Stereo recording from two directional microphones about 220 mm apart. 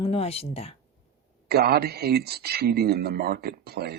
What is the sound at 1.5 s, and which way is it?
A man's voice, 45° right (ahead or behind).